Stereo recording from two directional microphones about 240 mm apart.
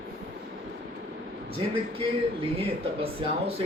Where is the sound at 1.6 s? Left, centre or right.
Centre.